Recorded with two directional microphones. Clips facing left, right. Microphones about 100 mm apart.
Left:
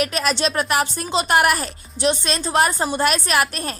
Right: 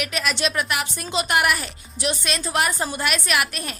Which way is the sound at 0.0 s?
35° left (ahead or behind).